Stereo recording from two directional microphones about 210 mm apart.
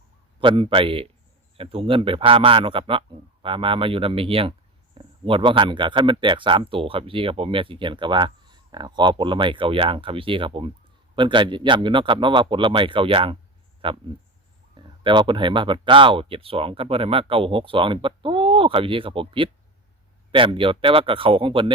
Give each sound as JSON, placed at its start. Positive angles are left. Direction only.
{"t": 0.3, "sound": "speech", "side_deg": -25}